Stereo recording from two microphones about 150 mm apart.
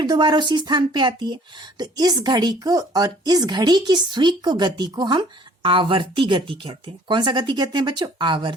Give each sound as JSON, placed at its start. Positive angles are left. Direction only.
{"t": 0.0, "sound": "speech", "side_deg": -30}